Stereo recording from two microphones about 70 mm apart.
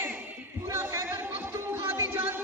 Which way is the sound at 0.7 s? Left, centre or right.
Right.